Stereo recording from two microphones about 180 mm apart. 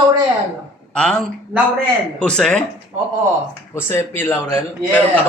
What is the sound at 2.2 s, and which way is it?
Speech, 5° left (ahead or behind).